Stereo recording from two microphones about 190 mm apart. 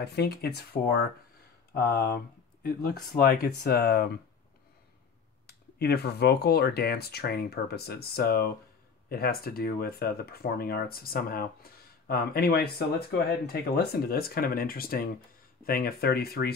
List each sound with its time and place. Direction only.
0.0 s speech: 60° left (ahead or behind)
5.5 s speech: 60° left (ahead or behind)